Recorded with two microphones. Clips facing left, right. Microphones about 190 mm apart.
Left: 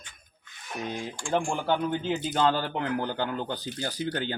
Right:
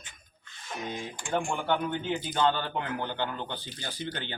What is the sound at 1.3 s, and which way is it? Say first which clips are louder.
Speech: left 2 dB; 35° left (ahead or behind).